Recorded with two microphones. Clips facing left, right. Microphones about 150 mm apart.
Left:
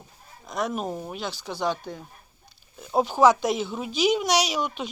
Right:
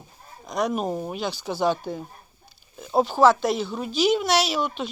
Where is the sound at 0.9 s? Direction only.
20° right (ahead or behind).